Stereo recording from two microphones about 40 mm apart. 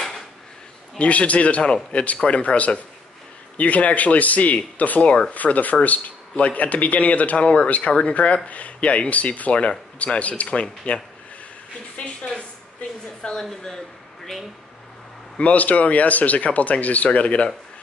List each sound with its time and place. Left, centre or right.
0.9 s speech: left
5.0 s speech: left
5.3 s speech: left
12.0 s a woman's voice: left
13.2 s speech: left
15.3 s speech: left